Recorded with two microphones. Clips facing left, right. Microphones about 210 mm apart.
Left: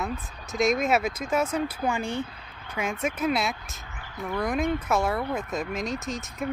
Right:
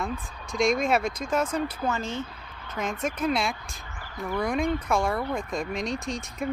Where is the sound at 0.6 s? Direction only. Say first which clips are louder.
Even; 5° left (ahead or behind).